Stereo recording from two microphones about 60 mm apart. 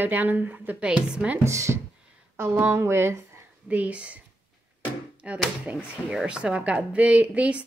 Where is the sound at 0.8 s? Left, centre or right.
Centre.